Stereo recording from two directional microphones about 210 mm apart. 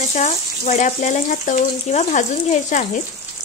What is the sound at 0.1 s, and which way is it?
Speech, 35° left (ahead or behind).